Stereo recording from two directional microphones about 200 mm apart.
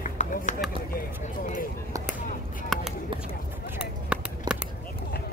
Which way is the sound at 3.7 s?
5° right (ahead or behind).